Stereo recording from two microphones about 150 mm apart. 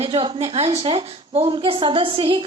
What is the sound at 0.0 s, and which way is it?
Speech, 35° right (ahead or behind).